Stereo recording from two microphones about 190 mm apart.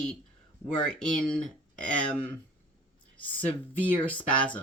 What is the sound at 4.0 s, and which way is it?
Speech, 10° left (ahead or behind).